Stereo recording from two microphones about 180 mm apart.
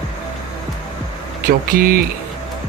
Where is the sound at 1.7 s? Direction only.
55° right (ahead or behind).